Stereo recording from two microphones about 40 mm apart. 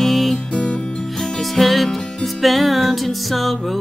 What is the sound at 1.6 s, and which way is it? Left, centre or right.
Music, centre.